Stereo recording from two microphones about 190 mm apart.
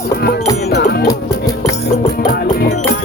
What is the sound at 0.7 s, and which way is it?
Music, 60° left (ahead or behind).